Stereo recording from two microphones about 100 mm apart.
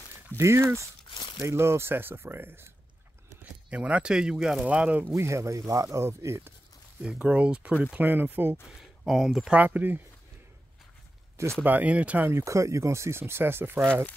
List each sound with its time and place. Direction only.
0.4 s speech: 25° right (ahead or behind)
1.1 s crumpling: 50° left (ahead or behind)
1.4 s speech: 25° right (ahead or behind)
3.7 s speech: 10° right (ahead or behind)
5.1 s speech: 30° right (ahead or behind)
7.0 s speech: 10° right (ahead or behind)
8.6 s speech: centre (ahead or behind)
9.5 s speech: 15° right (ahead or behind)
11.6 s speech: 15° right (ahead or behind)
12.3 s speech: 30° right (ahead or behind)